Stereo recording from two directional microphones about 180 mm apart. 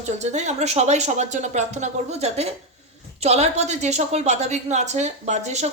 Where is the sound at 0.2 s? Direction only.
40° right (ahead or behind).